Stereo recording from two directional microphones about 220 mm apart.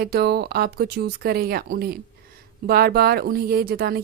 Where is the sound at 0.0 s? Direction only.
45° right (ahead or behind).